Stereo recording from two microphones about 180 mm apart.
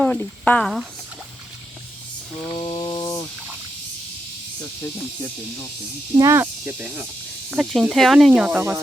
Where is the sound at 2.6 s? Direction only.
15° left (ahead or behind).